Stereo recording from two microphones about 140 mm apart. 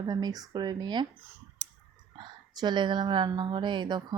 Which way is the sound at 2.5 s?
30° right (ahead or behind).